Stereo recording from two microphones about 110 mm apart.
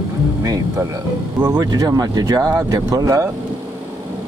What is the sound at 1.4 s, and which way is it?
Speech, 35° right (ahead or behind).